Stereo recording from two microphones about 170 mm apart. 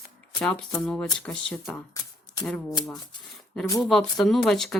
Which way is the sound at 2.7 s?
25° left (ahead or behind).